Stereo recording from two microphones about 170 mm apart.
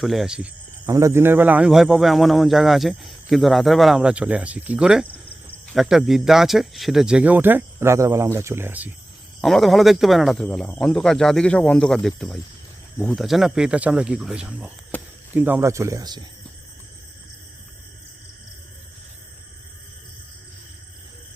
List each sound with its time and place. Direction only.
0.0 s speech: centre (ahead or behind)
0.9 s speech: 20° right (ahead or behind)
9.4 s speech: centre (ahead or behind)
14.9 s a sound: 10° left (ahead or behind)
15.4 s speech: 10° right (ahead or behind)